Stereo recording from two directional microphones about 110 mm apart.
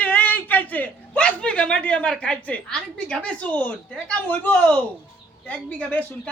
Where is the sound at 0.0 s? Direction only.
15° left (ahead or behind).